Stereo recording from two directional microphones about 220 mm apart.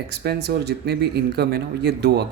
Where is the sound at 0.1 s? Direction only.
50° right (ahead or behind).